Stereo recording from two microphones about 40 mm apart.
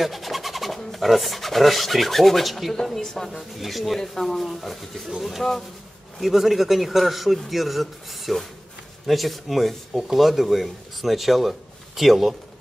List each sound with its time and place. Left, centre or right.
0.0 s speech: centre
2.7 s speech: centre